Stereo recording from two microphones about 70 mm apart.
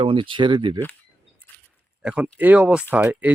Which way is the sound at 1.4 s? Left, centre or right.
Right.